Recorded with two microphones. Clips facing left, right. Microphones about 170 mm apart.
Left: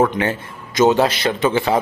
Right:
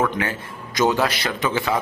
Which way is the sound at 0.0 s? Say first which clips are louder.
Left 5 dB; 25° left (ahead or behind).